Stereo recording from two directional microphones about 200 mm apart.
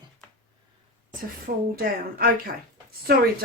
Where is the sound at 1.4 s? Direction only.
50° right (ahead or behind).